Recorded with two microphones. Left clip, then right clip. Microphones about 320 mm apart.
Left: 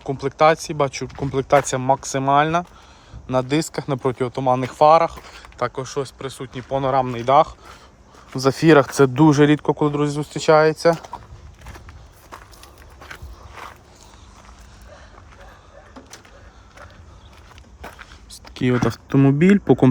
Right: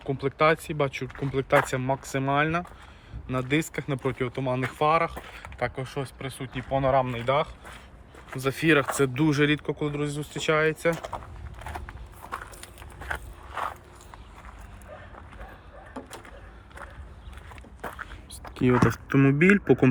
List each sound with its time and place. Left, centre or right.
0.0 s speech: centre
10.6 s speech: left
18.3 s speech: centre